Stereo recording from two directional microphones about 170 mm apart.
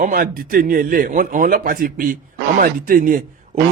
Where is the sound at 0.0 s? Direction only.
55° right (ahead or behind).